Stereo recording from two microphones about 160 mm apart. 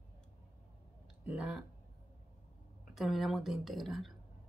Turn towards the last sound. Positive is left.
turn(degrees=0)  # may be behind; listen again after turning